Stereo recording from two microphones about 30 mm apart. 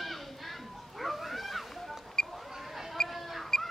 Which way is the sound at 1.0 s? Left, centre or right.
Centre.